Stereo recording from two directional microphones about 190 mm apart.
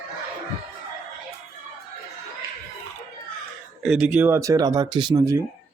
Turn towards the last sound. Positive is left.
turn(degrees=-20)  # may be behind; listen again after turning